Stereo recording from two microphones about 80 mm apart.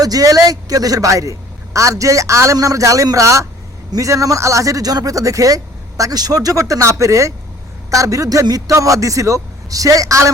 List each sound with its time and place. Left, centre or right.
0.0 s speech: right